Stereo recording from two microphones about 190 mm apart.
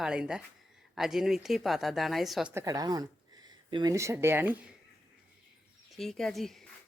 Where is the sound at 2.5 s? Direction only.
15° right (ahead or behind).